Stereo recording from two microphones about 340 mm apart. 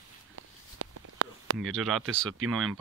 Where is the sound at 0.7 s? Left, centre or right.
Right.